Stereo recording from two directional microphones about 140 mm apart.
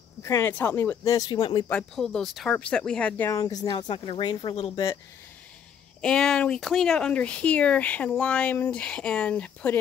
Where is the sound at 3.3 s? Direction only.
25° left (ahead or behind).